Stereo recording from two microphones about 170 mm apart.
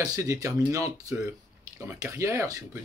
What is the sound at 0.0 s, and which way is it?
Speech, 20° right (ahead or behind).